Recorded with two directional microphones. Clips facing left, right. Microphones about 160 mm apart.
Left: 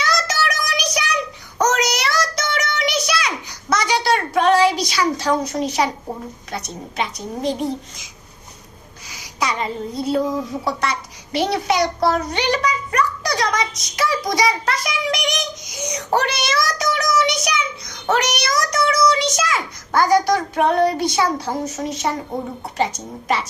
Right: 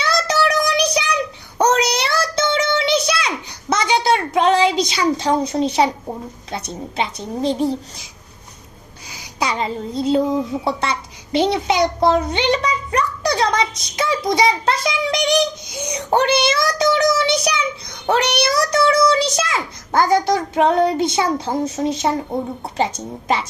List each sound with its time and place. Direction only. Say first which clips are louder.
0.0 s child singing: right 3 dB; 30° right (ahead or behind)
6.5 s a woman's voice: right 3 dB; 30° right (ahead or behind)
9.0 s a sound: right 1 dB; 30° right (ahead or behind)
18.0 s a child's voice: right 3 dB; 30° right (ahead or behind)